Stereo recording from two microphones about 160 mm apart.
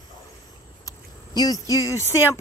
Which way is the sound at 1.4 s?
20° left (ahead or behind).